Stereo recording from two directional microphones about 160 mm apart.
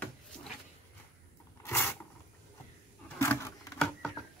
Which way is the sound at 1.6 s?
15° left (ahead or behind).